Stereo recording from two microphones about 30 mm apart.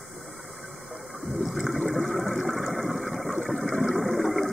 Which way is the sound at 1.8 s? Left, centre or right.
Centre.